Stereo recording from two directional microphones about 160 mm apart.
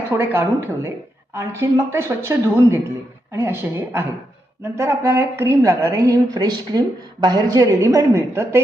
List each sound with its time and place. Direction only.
0.2 s a woman's voice: 15° right (ahead or behind)